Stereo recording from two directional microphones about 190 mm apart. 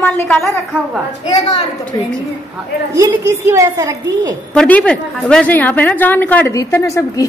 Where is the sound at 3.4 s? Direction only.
15° right (ahead or behind).